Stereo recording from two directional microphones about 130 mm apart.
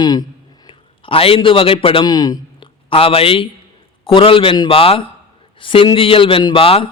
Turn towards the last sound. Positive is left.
turn(degrees=45)  # may be behind; listen again after turning